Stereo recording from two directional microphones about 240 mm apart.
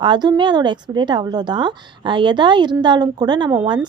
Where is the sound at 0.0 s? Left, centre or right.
Centre.